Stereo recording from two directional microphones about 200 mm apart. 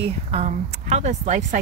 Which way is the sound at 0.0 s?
30° right (ahead or behind).